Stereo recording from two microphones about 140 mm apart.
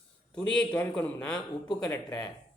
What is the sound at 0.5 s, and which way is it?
Speech, 10° left (ahead or behind).